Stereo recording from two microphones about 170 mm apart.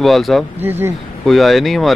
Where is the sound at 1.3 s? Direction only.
Centre (ahead or behind).